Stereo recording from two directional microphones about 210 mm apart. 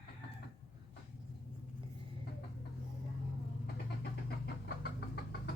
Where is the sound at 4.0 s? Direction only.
50° left (ahead or behind).